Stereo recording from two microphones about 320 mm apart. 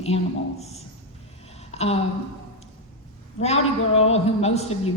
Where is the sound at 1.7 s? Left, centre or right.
Centre.